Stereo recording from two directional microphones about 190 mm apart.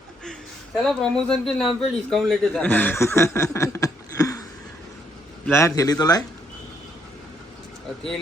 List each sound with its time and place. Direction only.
0.9 s speech: 5° left (ahead or behind); by 4.4 s 20° left (ahead or behind)
5.5 s speech: 15° left (ahead or behind)